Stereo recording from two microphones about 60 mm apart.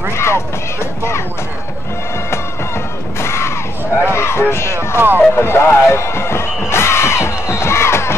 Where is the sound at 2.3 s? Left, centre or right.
Left.